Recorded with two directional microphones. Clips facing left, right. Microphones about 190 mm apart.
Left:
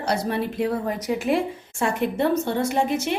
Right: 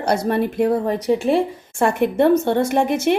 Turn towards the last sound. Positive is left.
turn(degrees=-55)  # may be behind; listen again after turning